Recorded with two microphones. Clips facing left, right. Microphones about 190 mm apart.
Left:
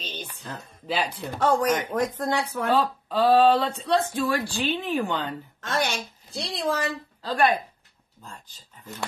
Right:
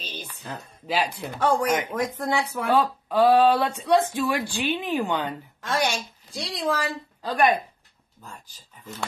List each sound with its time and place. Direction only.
0.0 s a sound: 10° right (ahead or behind)
0.4 s speech: 10° right (ahead or behind)
6.3 s speech: 10° right (ahead or behind)